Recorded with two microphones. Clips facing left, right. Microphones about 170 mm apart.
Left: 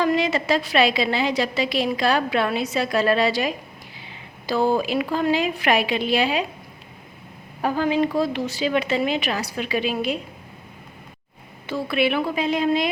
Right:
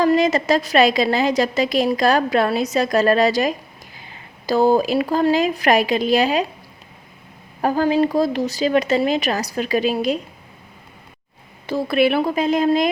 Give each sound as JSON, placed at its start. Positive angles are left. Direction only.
{"t": 0.0, "sound": "a woman's voice", "side_deg": -40}
{"t": 7.6, "sound": "speech", "side_deg": -40}
{"t": 11.6, "sound": "a woman's voice", "side_deg": -40}